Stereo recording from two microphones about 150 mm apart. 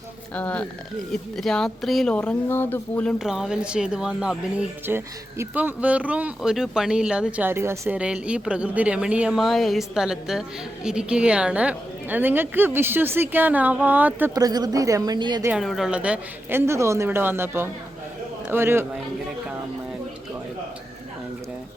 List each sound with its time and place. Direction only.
0.3 s speech: 10° left (ahead or behind)
3.2 s speech: 5° right (ahead or behind)
14.3 s a woman's voice: 25° right (ahead or behind)
15.4 s speech: 5° right (ahead or behind)